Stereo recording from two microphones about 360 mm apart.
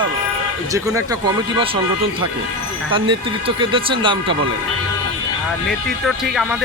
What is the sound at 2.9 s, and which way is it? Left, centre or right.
Speech, centre.